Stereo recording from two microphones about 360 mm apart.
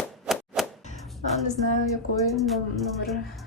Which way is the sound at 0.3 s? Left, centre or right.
Centre.